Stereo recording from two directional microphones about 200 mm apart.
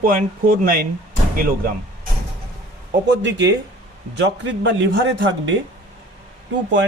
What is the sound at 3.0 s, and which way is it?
Speech, 60° right (ahead or behind).